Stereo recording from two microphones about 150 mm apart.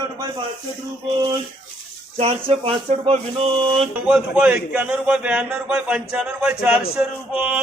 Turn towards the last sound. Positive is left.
turn(degrees=-10)  # may be behind; listen again after turning